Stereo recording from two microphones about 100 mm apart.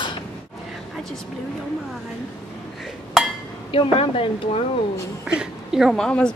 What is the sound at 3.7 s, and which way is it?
Speech, 60° left (ahead or behind).